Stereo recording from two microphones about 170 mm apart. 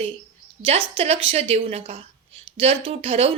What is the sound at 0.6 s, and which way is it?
Speech, 35° right (ahead or behind).